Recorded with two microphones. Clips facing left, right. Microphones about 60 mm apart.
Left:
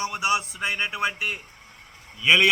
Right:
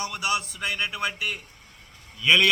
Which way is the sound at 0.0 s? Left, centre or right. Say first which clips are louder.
Left 3 dB; left.